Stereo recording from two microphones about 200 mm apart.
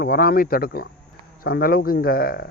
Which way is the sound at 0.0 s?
50° left (ahead or behind).